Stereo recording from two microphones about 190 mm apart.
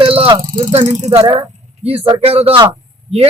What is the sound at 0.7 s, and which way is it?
A man's voice, 35° right (ahead or behind).